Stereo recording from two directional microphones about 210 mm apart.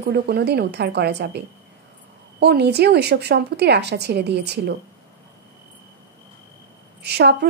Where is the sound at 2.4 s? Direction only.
50° right (ahead or behind).